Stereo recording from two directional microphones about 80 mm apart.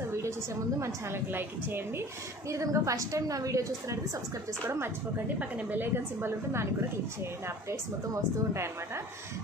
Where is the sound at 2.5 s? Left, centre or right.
Right.